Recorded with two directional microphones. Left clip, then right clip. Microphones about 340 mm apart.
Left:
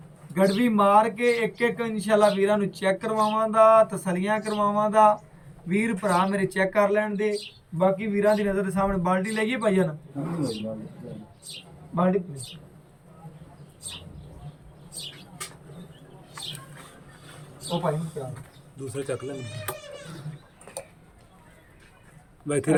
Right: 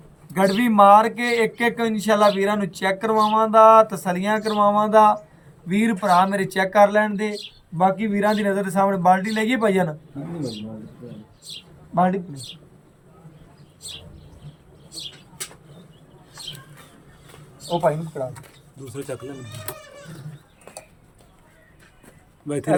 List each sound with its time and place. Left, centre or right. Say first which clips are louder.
0.3 s speech: right 6 dB; centre
11.9 s speech: right 4 dB; centre
18.9 s speech: left 1 dB; centre
22.4 s speech: even; centre